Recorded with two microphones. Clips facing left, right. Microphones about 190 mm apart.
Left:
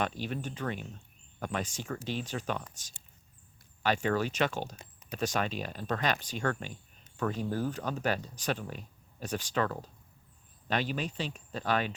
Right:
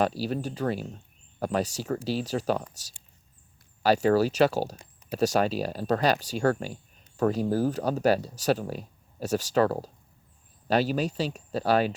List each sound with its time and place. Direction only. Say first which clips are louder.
0.0 s speech: right 7 dB; 35° right (ahead or behind)